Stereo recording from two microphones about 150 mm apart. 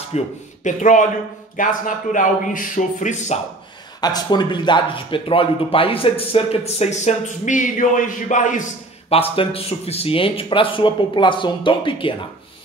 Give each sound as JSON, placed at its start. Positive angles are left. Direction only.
{"t": 0.1, "sound": "speech", "side_deg": 45}
{"t": 0.7, "sound": "speech", "side_deg": 55}
{"t": 4.0, "sound": "speech", "side_deg": 30}
{"t": 9.3, "sound": "speech", "side_deg": 40}